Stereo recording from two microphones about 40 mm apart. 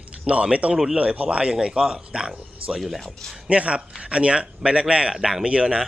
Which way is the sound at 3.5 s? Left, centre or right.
Right.